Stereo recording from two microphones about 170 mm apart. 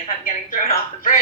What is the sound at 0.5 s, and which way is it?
Speech, 50° left (ahead or behind).